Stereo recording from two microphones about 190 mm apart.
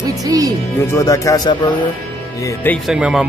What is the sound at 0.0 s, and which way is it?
Speech, 20° right (ahead or behind).